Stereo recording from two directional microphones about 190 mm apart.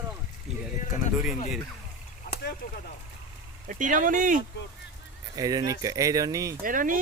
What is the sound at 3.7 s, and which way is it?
Speech, 45° right (ahead or behind).